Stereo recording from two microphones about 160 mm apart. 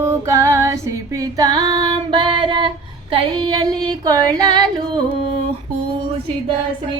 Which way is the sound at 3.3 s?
25° right (ahead or behind).